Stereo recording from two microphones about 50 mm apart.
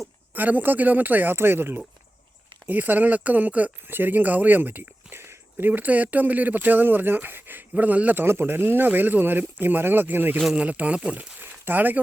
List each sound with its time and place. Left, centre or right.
0.3 s speech: right
1.4 s speech: right
2.6 s speech: right
3.8 s speech: right
5.2 s a sound: right
5.6 s speech: right
7.7 s speech: right
8.3 s speech: right
10.5 s speech: right
11.3 s a sound: right